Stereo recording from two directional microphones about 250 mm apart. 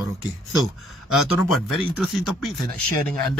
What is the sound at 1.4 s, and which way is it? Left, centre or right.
Speech, centre.